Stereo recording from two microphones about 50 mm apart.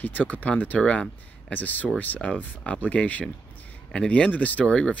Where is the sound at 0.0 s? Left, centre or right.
Left.